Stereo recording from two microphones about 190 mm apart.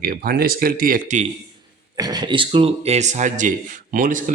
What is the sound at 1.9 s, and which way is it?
Speech, 20° right (ahead or behind).